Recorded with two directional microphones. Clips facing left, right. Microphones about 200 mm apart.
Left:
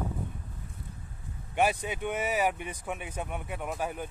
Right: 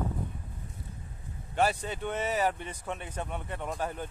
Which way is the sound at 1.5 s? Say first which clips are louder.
Left 1 dB; 15° left (ahead or behind).